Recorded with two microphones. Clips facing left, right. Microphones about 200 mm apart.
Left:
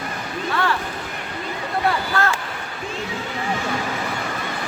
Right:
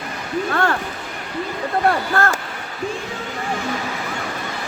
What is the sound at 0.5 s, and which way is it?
Speech, 50° right (ahead or behind).